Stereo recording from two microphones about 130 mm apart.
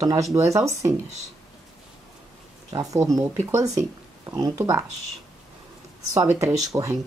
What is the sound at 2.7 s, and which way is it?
Speech, 25° right (ahead or behind).